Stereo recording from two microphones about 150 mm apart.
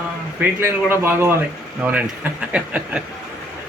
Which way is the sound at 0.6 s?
15° right (ahead or behind).